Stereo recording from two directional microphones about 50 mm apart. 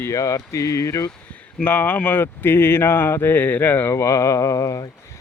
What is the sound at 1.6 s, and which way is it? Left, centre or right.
Speech, left.